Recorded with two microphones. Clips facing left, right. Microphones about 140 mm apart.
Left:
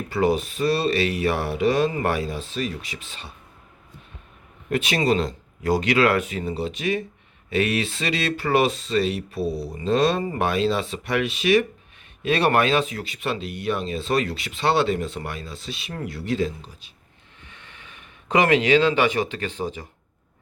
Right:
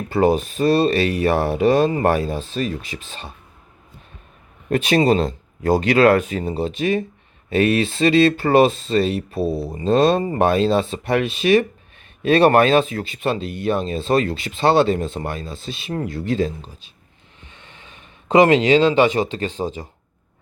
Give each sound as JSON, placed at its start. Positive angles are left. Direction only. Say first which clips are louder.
{"t": 0.1, "sound": "speech", "louder": "right 5 dB", "side_deg": -40}
{"t": 4.7, "sound": "speech", "louder": "right 5 dB", "side_deg": -35}
{"t": 17.4, "sound": "speech", "louder": "right 2 dB", "side_deg": -25}